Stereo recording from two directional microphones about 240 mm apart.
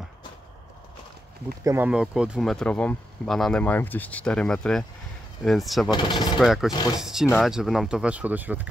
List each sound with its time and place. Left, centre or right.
1.6 s speech: centre
5.9 s speech: centre
6.4 s speech: centre